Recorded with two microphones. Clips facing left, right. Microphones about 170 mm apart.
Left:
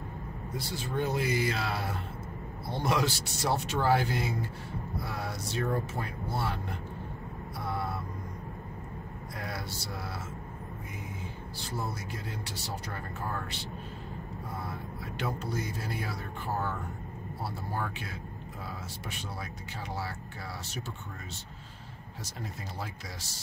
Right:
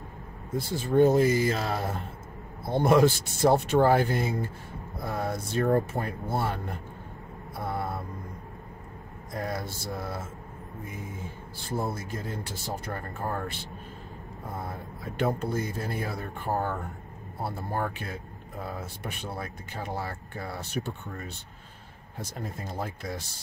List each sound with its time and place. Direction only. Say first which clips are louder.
0.5 s speech: right 8 dB; 50° right (ahead or behind)
7.5 s vehicle: right 3 dB; 50° right (ahead or behind)
9.3 s speech: right 7 dB; 45° right (ahead or behind)
11.7 s speech: right 6 dB; 50° right (ahead or behind)
22.2 s speech: right 5 dB; 50° right (ahead or behind)